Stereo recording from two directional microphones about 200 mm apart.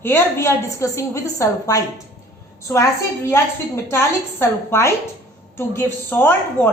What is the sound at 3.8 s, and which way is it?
A woman's voice, 10° left (ahead or behind).